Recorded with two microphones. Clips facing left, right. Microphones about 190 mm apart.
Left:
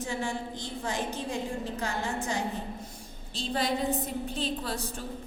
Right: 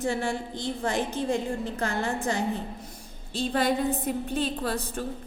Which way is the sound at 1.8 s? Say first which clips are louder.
Right 6 dB; 55° right (ahead or behind).